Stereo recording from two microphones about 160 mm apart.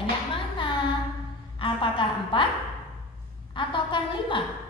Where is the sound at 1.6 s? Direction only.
30° left (ahead or behind).